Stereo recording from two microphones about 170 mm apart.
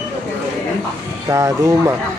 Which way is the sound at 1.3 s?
20° right (ahead or behind).